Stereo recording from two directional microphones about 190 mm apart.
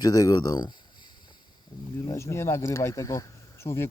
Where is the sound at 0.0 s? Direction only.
20° left (ahead or behind).